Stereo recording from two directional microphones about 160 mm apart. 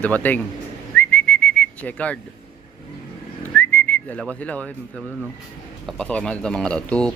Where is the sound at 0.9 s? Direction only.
10° left (ahead or behind).